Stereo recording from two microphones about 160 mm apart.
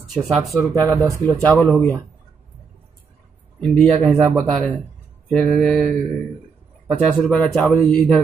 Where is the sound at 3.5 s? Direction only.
5° left (ahead or behind).